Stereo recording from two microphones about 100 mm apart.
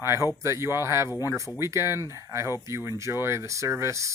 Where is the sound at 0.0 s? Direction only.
25° right (ahead or behind).